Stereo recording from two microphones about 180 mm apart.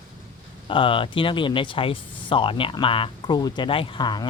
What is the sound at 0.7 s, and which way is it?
Speech, 30° left (ahead or behind).